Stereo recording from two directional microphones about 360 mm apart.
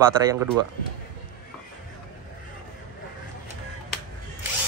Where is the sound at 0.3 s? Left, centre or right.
Centre.